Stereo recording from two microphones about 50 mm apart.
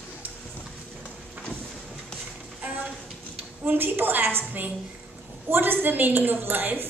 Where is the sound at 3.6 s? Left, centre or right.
Right.